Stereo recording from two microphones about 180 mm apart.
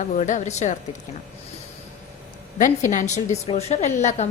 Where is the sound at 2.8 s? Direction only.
40° left (ahead or behind).